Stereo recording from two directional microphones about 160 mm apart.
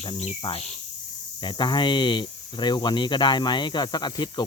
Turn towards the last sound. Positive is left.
turn(degrees=25)  # may be behind; listen again after turning